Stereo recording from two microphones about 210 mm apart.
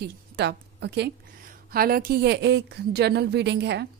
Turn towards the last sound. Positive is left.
turn(degrees=-55)  # may be behind; listen again after turning